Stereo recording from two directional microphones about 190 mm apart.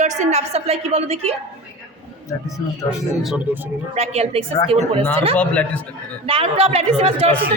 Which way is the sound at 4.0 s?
35° right (ahead or behind).